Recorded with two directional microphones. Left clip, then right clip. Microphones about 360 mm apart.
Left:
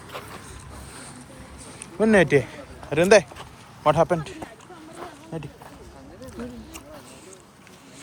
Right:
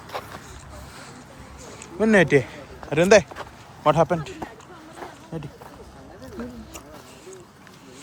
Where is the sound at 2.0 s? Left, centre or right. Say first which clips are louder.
Even; centre.